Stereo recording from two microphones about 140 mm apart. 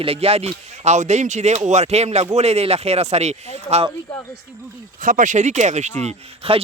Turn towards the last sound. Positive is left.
turn(degrees=-50)  # may be behind; listen again after turning